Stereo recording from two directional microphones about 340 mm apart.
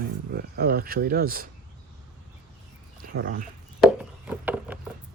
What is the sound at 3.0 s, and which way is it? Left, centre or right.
Speech, right.